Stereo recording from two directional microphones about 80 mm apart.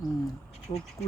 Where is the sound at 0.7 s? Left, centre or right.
Left.